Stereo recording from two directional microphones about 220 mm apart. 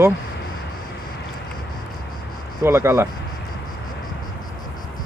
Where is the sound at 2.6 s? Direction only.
10° right (ahead or behind).